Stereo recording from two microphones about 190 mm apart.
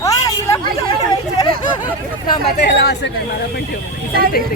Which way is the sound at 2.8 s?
65° left (ahead or behind).